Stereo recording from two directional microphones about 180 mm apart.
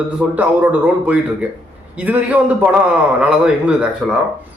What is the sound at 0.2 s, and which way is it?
A man's voice, 10° right (ahead or behind).